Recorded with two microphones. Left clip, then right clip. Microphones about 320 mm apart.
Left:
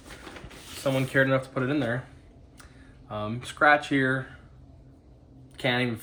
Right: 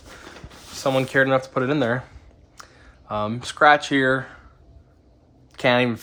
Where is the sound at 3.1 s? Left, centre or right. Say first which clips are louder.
Right 8 dB; centre.